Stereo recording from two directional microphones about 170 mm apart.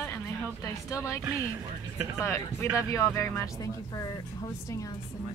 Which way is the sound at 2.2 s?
15° left (ahead or behind).